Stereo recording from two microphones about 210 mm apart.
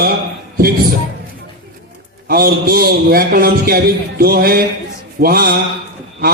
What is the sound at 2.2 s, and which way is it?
Speech, 45° right (ahead or behind).